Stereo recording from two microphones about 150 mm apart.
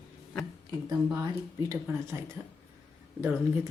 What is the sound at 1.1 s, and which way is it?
Speech, 25° right (ahead or behind).